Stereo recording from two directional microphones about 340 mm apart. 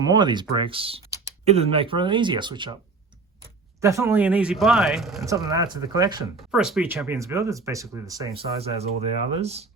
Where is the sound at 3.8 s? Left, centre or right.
Centre.